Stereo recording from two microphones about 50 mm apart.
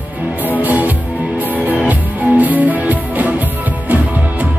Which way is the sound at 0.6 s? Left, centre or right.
Right.